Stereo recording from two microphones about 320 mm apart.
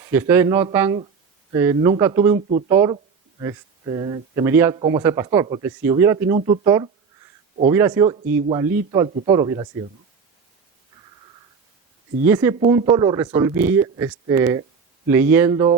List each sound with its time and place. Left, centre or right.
0.0 s speech: centre
12.2 s speech: centre